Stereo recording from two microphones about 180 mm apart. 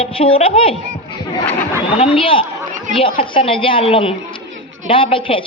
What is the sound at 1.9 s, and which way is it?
A man's voice, 35° left (ahead or behind).